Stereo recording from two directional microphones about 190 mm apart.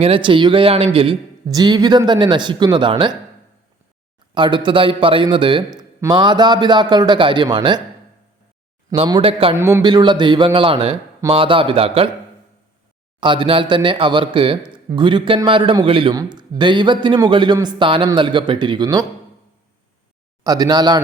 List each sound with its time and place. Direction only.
0.0 s a man's voice: 30° right (ahead or behind)
4.4 s a man's voice: 25° right (ahead or behind)
9.0 s a man's voice: 25° right (ahead or behind)
9.6 s a man's voice: 15° right (ahead or behind)
9.8 s a man's voice: 25° right (ahead or behind)
13.1 s a man's voice: 25° right (ahead or behind)
20.4 s a man's voice: 20° right (ahead or behind)